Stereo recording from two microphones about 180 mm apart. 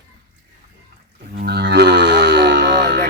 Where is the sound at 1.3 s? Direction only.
55° right (ahead or behind).